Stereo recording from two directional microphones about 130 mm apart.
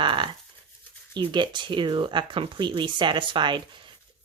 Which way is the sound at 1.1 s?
35° right (ahead or behind).